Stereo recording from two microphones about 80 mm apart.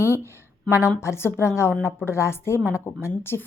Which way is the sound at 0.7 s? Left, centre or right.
Left.